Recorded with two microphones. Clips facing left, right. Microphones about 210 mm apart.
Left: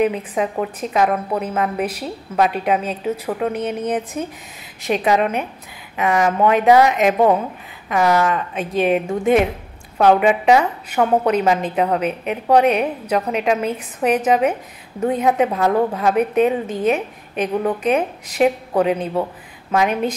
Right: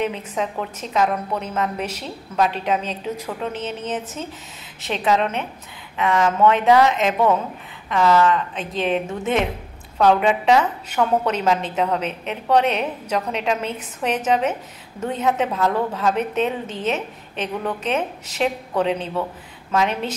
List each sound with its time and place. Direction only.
0.0 s a woman's voice: 10° left (ahead or behind)